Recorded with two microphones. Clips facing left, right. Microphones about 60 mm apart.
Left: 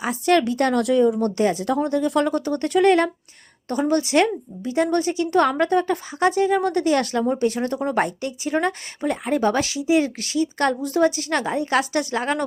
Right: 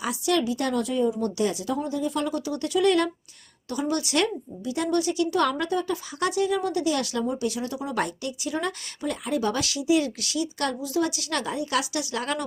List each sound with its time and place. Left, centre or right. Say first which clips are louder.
0.0 s a woman's voice: left 6 dB; left
1.4 s a woman's voice: left 5 dB; left
1.6 s a woman's voice: left 6 dB; left
6.1 s a woman's voice: left 6 dB; left
6.6 s a woman's voice: left 5 dB; left
7.9 s a woman's voice: left 5 dB; left